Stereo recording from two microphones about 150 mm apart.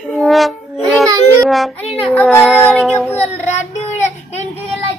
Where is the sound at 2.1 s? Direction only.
10° left (ahead or behind).